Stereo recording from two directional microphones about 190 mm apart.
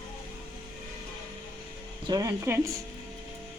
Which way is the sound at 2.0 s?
20° right (ahead or behind).